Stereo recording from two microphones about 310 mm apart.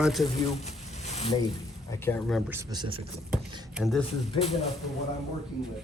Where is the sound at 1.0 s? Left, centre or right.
Left.